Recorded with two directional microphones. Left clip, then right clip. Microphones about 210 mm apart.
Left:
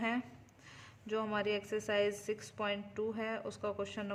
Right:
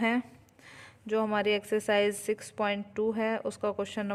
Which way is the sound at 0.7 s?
35° right (ahead or behind).